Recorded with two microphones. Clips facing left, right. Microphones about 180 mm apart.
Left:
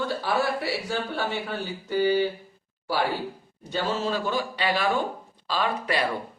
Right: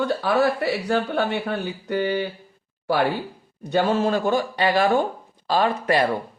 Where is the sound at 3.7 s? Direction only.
55° right (ahead or behind).